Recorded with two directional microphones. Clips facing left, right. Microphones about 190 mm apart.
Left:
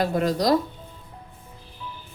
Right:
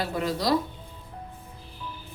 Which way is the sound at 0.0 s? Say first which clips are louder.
Left 5 dB; 45° left (ahead or behind).